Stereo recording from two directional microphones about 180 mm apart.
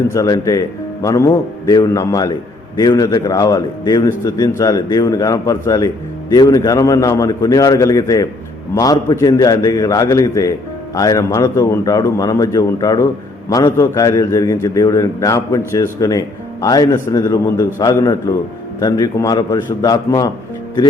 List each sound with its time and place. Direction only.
0.1 s a man's voice: 20° left (ahead or behind)